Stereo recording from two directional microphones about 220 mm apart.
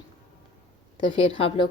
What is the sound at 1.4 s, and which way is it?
Speech, 25° left (ahead or behind).